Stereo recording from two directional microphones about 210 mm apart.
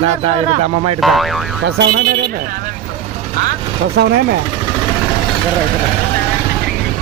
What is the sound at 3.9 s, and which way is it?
Speech, 50° right (ahead or behind).